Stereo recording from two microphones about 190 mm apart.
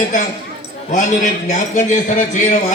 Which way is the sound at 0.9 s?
40° left (ahead or behind).